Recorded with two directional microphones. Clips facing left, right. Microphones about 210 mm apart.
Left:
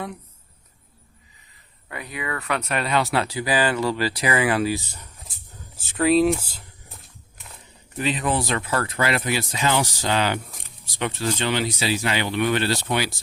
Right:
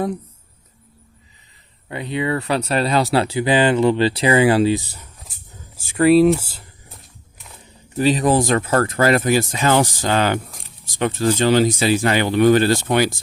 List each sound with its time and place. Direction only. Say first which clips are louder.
1.9 s speech: right 9 dB; 25° right (ahead or behind)
5.7 s a sound: right 6 dB; 5° right (ahead or behind)
7.9 s speech: right 8 dB; 35° right (ahead or behind)